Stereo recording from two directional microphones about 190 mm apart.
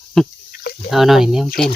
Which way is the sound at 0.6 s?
55° left (ahead or behind).